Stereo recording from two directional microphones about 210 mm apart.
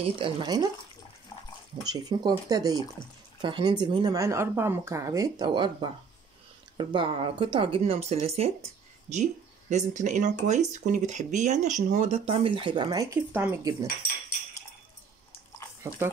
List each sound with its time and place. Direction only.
0.0 s speech: 25° right (ahead or behind)
1.8 s speech: 20° right (ahead or behind)
15.8 s speech: 10° right (ahead or behind)